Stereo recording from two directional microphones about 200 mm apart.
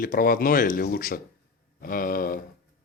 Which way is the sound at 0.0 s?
45° left (ahead or behind).